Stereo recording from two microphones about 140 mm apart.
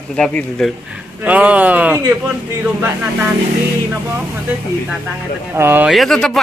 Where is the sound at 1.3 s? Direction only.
10° right (ahead or behind).